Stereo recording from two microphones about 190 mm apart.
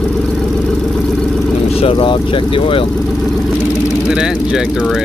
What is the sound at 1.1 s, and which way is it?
Vehicle, centre (ahead or behind).